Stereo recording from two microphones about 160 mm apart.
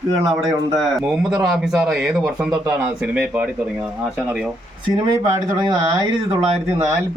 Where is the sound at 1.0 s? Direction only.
5° right (ahead or behind).